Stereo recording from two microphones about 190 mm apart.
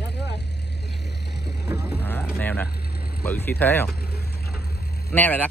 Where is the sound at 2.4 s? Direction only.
10° left (ahead or behind).